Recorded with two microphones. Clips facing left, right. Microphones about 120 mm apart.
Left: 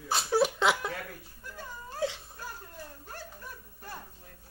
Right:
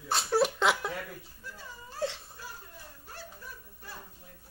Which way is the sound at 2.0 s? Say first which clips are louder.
Left 1 dB; centre (ahead or behind).